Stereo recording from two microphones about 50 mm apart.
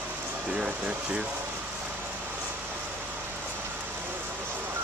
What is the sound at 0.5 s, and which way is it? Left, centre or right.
Speech, centre.